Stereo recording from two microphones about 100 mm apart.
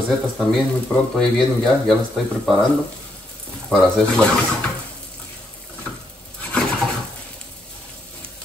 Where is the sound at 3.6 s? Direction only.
Centre (ahead or behind).